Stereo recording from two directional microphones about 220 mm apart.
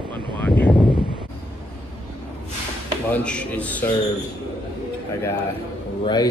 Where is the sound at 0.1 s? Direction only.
10° left (ahead or behind).